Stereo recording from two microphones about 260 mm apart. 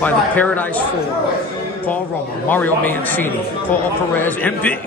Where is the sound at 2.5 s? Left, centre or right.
Centre.